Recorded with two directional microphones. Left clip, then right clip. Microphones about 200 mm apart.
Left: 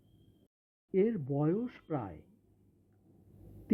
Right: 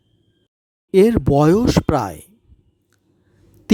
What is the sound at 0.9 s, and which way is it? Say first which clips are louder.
Speech: right 18 dB; 55° right (ahead or behind).